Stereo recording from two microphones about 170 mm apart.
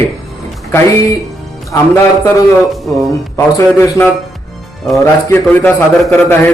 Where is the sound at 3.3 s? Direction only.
15° left (ahead or behind).